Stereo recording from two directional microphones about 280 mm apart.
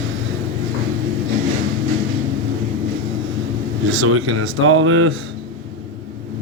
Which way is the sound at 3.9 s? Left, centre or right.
Right.